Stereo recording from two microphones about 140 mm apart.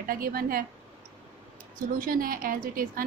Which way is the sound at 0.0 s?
90° right.